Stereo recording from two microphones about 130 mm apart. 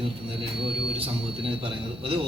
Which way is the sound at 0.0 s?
45° right (ahead or behind).